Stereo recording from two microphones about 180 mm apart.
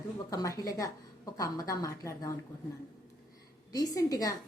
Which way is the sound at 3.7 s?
20° left (ahead or behind).